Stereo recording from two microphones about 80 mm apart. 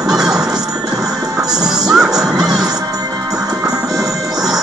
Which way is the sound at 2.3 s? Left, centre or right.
Right.